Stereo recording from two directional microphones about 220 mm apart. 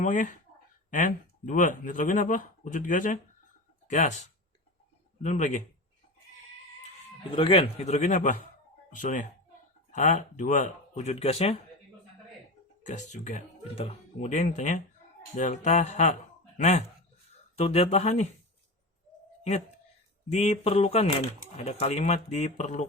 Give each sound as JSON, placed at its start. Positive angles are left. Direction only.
{"t": 0.0, "sound": "speech", "side_deg": 35}
{"t": 7.3, "sound": "a man's voice", "side_deg": 20}
{"t": 12.8, "sound": "a man's voice", "side_deg": 30}
{"t": 20.3, "sound": "a man's voice", "side_deg": 30}